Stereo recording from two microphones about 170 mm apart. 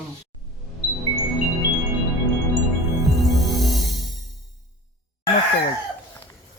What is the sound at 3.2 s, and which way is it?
Music, centre (ahead or behind).